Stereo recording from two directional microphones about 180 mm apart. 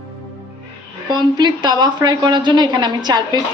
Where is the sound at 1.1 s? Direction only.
25° right (ahead or behind).